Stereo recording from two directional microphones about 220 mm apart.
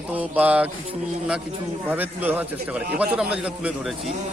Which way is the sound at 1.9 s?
10° right (ahead or behind).